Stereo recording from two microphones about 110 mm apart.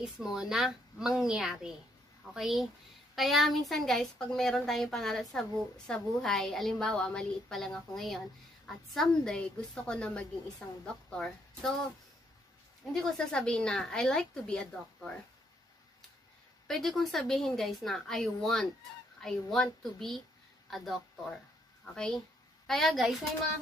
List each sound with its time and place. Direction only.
0.0 s a woman's voice: 5° right (ahead or behind)
12.9 s a woman's voice: 5° left (ahead or behind)
16.6 s a woman's voice: centre (ahead or behind)